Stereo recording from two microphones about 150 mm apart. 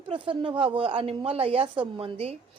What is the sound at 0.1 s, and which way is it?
A woman's voice, 35° right (ahead or behind).